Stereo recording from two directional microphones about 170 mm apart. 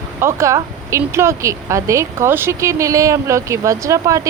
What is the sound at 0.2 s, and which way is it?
Speech, 15° right (ahead or behind).